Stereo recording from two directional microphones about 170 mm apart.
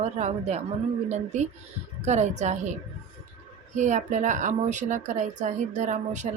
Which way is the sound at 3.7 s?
45° right (ahead or behind).